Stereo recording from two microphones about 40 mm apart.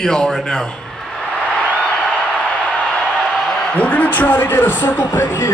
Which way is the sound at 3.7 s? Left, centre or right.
Left.